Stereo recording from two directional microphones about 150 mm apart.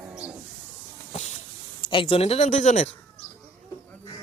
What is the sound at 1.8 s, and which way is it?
Speech, 35° left (ahead or behind).